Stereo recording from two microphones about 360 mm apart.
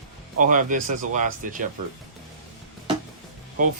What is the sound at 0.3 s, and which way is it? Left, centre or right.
Speech, right.